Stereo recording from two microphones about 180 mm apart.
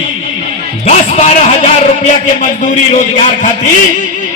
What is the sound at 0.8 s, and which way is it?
A man's voice, 40° left (ahead or behind).